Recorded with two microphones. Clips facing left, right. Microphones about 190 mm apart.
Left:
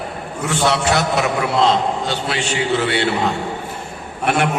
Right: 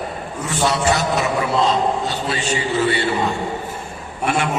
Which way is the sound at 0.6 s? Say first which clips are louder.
Left 1 dB; 75° left (ahead or behind).